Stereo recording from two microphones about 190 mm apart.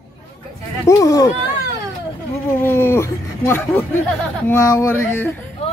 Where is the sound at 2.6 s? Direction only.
10° left (ahead or behind).